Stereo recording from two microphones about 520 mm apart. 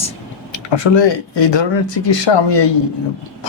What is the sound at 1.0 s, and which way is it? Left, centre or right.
Speech, left.